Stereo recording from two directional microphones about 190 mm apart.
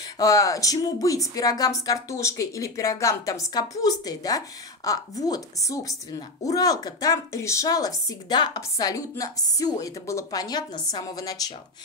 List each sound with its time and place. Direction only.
0.2 s a woman's voice: 20° left (ahead or behind)